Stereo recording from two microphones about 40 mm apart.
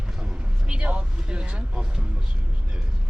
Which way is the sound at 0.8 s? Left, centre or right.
Right.